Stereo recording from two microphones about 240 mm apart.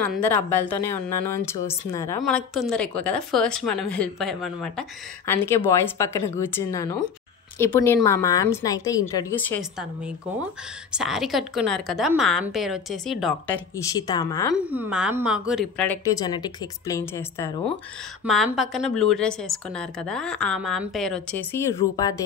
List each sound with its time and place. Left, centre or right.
0.0 s a woman's voice: centre
2.2 s a woman's voice: centre
5.2 s a woman's voice: centre
9.6 s a woman's voice: centre
13.9 s a woman's voice: centre
14.7 s a woman's voice: centre
18.2 s a woman's voice: centre